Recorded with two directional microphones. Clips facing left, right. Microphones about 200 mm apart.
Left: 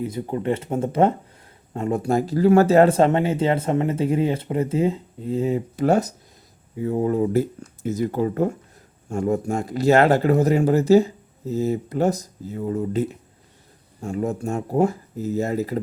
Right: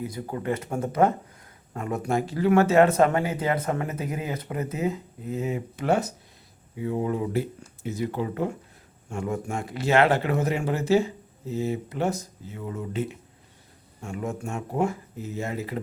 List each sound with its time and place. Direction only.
0.0 s speech: 25° left (ahead or behind); by 15.8 s 40° left (ahead or behind)